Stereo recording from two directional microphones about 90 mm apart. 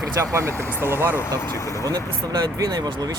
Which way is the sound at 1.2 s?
30° left (ahead or behind).